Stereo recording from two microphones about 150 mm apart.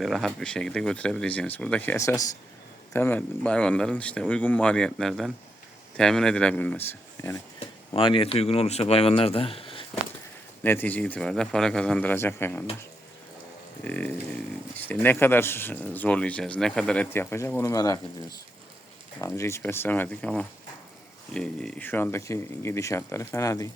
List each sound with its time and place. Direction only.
0.0 s speech: centre (ahead or behind); by 7.4 s 20° left (ahead or behind)
7.9 s speech: 35° left (ahead or behind)
10.6 s speech: 15° left (ahead or behind)
13.8 s speech: 10° left (ahead or behind)
19.2 s speech: 20° left (ahead or behind)